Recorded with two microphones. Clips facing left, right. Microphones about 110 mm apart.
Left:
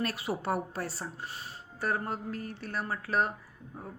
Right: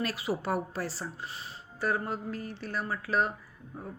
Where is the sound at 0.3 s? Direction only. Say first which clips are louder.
Right 4 dB; 5° left (ahead or behind).